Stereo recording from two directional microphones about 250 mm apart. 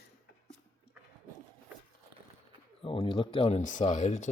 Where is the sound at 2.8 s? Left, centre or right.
Centre.